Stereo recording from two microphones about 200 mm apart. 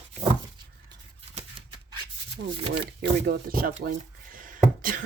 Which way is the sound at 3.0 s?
50° right (ahead or behind).